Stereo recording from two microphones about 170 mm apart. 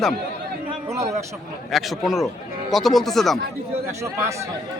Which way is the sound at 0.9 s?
15° right (ahead or behind).